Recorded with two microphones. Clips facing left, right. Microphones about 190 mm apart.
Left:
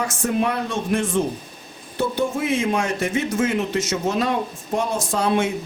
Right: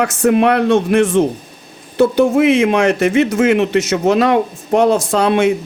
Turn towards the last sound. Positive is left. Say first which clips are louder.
# right 7 dB
turn(degrees=-70)  # may be behind; listen again after turning